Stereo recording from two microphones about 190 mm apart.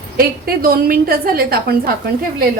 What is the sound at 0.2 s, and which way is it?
A woman's voice, 50° right (ahead or behind).